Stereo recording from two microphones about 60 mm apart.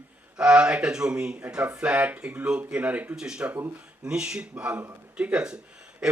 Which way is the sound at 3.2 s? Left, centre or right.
Centre.